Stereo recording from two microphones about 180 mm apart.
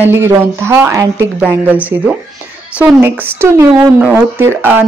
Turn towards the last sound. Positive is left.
turn(degrees=-10)  # may be behind; listen again after turning